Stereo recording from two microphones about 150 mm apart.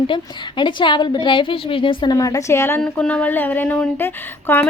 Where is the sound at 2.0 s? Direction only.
25° left (ahead or behind).